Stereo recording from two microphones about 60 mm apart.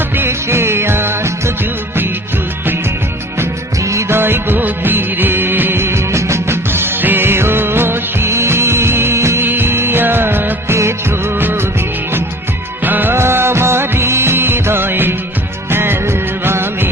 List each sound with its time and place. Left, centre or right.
0.2 s music: right
4.1 s music: right
9.5 s music: right
12.8 s music: right
13.1 s music: right